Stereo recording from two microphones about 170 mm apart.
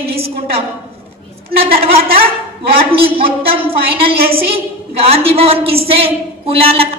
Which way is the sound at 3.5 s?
35° right (ahead or behind).